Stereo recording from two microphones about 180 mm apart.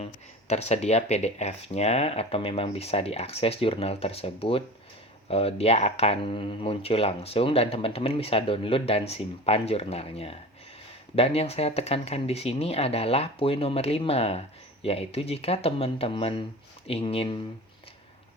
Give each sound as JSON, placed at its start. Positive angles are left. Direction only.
{"t": 0.0, "sound": "speech", "side_deg": 35}